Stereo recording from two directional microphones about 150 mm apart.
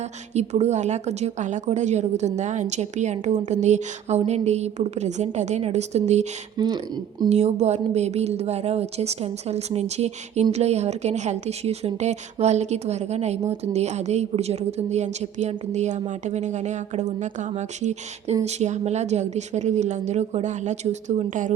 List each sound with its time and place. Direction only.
0.0 s a woman's voice: 45° right (ahead or behind)
6.6 s speech: 25° right (ahead or behind)
7.3 s a woman's voice: 45° right (ahead or behind)